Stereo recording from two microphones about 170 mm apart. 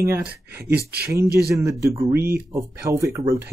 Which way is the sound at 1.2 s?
65° right (ahead or behind).